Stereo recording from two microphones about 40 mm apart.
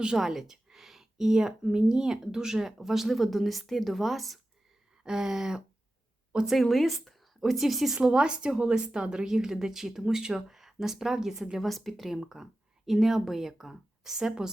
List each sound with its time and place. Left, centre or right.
0.2 s a sound: centre
1.6 s speech: centre
5.0 s a woman's voice: centre
7.9 s a woman's voice: right
11.6 s speech: centre